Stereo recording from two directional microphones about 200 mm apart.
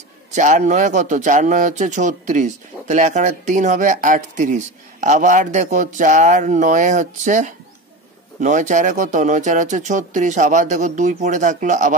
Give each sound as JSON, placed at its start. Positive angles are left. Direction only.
{"t": 0.3, "sound": "speech", "side_deg": -35}